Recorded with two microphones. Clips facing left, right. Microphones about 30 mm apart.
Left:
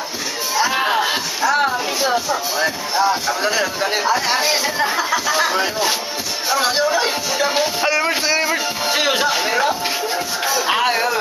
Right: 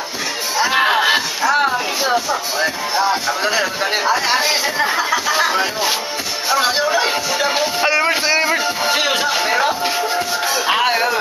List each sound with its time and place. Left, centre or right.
0.6 s music: centre
1.4 s speech: centre
7.9 s music: centre